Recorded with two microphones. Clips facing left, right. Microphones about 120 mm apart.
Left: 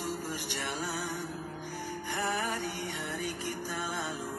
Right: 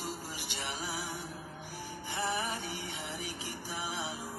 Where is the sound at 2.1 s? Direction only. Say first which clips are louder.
Left 2 dB; 60° left (ahead or behind).